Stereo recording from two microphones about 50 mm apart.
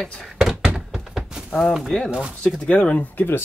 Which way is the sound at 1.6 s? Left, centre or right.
Centre.